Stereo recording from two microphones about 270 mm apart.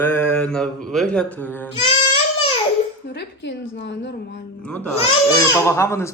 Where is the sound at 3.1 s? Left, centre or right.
Left.